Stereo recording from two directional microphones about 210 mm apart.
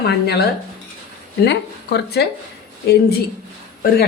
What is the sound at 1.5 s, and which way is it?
Speech, 50° left (ahead or behind).